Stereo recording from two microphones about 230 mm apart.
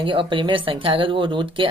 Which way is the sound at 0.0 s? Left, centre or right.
Right.